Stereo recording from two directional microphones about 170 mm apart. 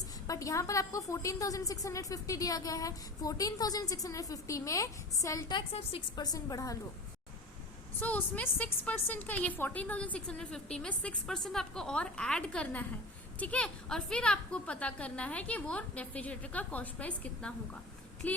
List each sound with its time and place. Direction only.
0.3 s a woman's voice: 20° left (ahead or behind)
7.9 s a woman's voice: 10° left (ahead or behind)